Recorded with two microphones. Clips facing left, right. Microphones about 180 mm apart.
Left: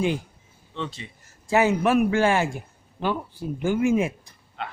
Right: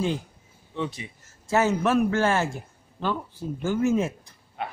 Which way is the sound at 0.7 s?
15° right (ahead or behind).